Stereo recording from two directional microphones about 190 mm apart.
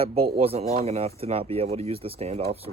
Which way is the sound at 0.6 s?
50° right (ahead or behind).